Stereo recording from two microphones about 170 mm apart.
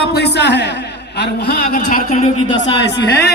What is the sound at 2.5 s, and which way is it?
Speech, 90° left.